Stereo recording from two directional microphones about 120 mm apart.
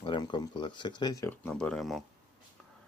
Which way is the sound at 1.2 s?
15° left (ahead or behind).